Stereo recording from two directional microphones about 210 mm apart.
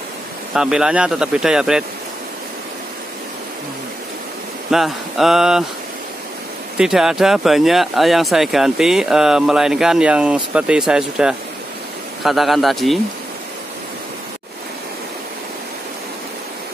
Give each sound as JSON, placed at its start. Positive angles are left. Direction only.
{"t": 0.6, "sound": "speech", "side_deg": -5}
{"t": 4.6, "sound": "speech", "side_deg": 0}
{"t": 6.8, "sound": "speech", "side_deg": 0}